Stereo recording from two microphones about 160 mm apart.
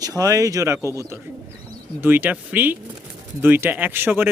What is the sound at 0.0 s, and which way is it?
Speech, 20° right (ahead or behind).